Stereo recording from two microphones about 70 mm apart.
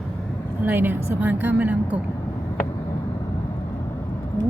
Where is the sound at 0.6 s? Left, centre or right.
Right.